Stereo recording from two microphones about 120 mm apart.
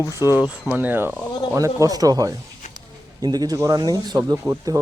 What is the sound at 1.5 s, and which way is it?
Speech, 30° right (ahead or behind).